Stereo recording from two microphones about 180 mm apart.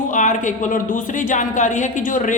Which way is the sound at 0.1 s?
45° left (ahead or behind).